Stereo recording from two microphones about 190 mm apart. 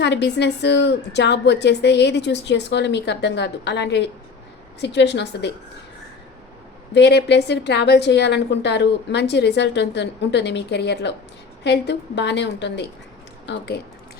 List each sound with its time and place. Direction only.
0.0 s a woman's voice: 65° left (ahead or behind)
6.9 s a woman's voice: 60° left (ahead or behind)